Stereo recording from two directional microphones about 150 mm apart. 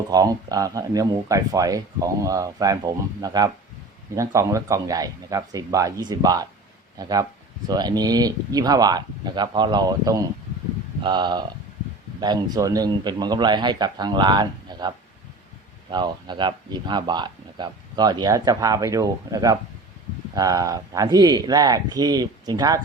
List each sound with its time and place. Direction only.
0.1 s speech: 25° right (ahead or behind)